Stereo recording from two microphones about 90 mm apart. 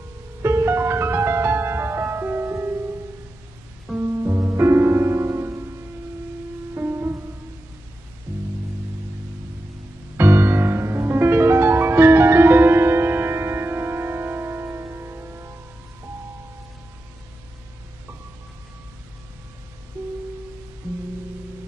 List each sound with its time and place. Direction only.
0.4 s music: 30° right (ahead or behind)
4.0 s music: 30° right (ahead or behind)
6.7 s music: 25° right (ahead or behind)
10.1 s music: 30° right (ahead or behind)